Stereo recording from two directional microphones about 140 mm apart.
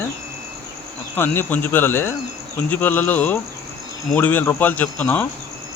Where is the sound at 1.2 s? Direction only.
15° left (ahead or behind).